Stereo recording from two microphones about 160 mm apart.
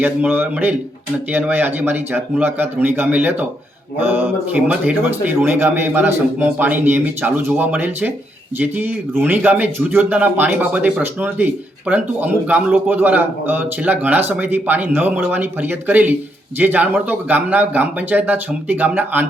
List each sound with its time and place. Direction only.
0.0 s a man's voice: 10° right (ahead or behind)